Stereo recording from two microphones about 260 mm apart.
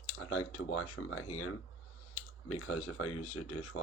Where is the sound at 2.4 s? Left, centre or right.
Left.